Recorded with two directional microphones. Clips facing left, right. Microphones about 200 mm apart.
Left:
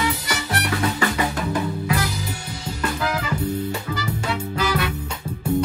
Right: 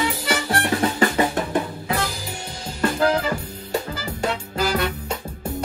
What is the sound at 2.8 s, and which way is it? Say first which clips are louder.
Music: right 6 dB; 40° right (ahead or behind).